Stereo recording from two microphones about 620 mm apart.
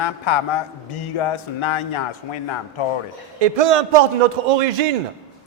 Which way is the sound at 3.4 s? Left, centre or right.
Right.